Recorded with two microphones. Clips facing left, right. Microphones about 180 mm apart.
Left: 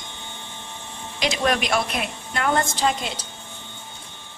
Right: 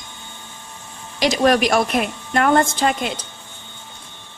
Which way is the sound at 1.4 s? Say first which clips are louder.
Right 7 dB; 45° right (ahead or behind).